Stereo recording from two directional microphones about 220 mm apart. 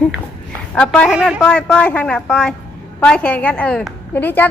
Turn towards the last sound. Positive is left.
turn(degrees=10)  # may be behind; listen again after turning